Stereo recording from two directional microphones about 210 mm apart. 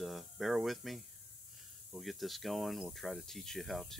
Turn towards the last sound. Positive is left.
turn(degrees=0)  # may be behind; listen again after turning